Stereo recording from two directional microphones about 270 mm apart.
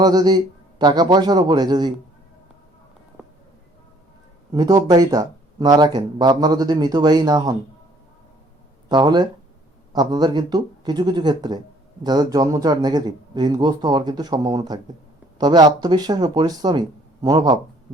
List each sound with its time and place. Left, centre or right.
0.0 s speech: centre
4.5 s speech: centre
8.9 s speech: centre